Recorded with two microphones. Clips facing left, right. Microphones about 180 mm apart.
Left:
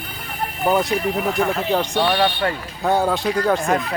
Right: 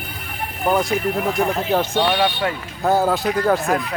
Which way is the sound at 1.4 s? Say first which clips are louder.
Even; 20° right (ahead or behind).